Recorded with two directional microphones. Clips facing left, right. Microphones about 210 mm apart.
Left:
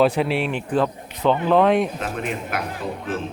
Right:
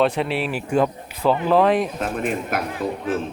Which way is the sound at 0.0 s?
Centre (ahead or behind).